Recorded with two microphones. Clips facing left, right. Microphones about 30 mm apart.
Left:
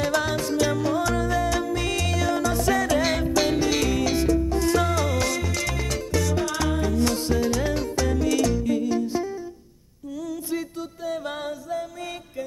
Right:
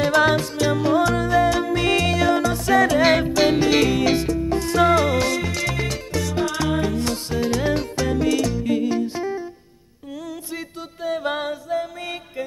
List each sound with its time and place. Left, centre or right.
0.0 s music: right
11.1 s a capella: right